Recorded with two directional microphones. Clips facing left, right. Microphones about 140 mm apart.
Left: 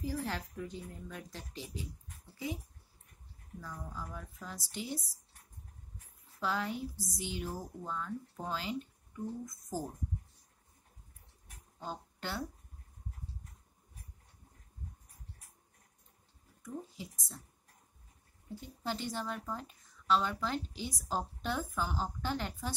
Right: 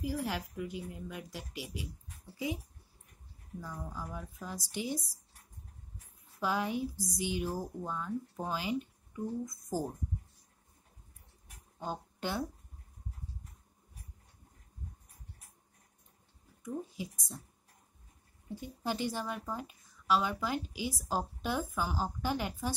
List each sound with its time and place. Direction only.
0.0 s a woman's voice: 10° right (ahead or behind)
3.6 s a woman's voice: 15° right (ahead or behind)
6.4 s a woman's voice: 15° right (ahead or behind)
11.8 s speech: 15° right (ahead or behind)
16.6 s a woman's voice: 15° right (ahead or behind)
18.5 s a woman's voice: 15° right (ahead or behind)